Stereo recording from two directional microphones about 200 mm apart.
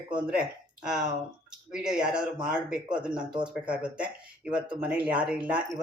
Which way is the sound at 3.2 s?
25° right (ahead or behind).